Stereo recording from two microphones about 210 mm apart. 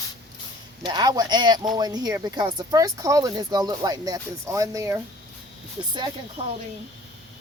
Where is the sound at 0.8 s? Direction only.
20° right (ahead or behind).